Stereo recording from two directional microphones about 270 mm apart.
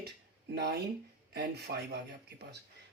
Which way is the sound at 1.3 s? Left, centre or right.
Right.